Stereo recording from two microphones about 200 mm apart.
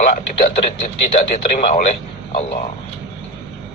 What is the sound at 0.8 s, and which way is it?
Speech, 35° left (ahead or behind).